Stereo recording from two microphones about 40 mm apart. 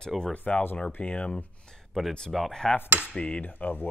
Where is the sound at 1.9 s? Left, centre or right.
Centre.